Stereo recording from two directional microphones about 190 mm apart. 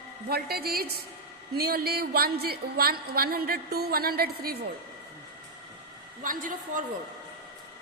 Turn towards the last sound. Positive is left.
turn(degrees=-45)  # may be behind; listen again after turning